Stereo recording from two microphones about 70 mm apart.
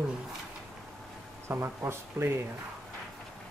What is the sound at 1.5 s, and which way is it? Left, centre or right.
Speech, right.